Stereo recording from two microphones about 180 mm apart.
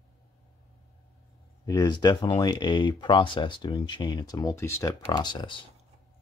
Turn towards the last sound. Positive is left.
turn(degrees=25)  # may be behind; listen again after turning